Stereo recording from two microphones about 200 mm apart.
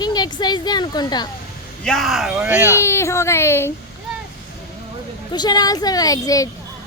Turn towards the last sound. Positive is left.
turn(degrees=15)  # may be behind; listen again after turning